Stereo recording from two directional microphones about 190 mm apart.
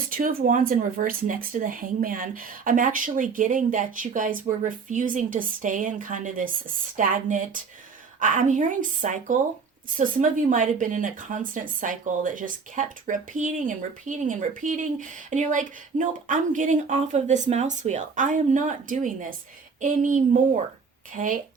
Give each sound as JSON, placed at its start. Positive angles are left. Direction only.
{"t": 0.1, "sound": "a woman's voice", "side_deg": -45}